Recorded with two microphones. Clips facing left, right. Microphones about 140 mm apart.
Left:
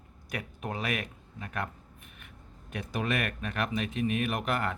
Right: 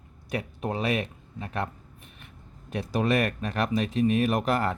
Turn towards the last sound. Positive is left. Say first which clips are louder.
# right 6 dB
turn(degrees=-35)  # may be behind; listen again after turning